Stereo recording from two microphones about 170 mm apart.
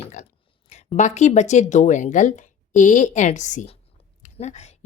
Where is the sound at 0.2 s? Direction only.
45° left (ahead or behind).